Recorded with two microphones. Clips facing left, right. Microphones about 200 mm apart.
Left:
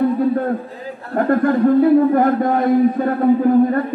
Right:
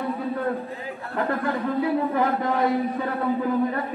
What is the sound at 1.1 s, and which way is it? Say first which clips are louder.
A man's voice: left 10 dB; 50° left (ahead or behind).